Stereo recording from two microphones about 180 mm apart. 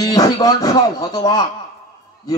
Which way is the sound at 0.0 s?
20° left (ahead or behind).